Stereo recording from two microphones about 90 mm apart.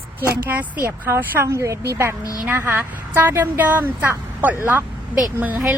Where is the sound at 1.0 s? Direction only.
25° right (ahead or behind).